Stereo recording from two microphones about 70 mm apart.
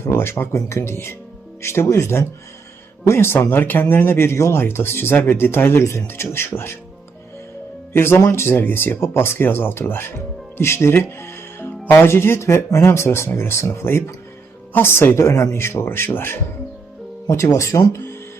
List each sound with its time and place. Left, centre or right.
0.0 s speech: left
7.9 s speech: left
11.6 s speech: left
17.2 s speech: left